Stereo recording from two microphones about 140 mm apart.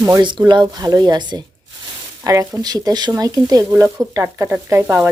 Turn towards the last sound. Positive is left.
turn(degrees=-15)  # may be behind; listen again after turning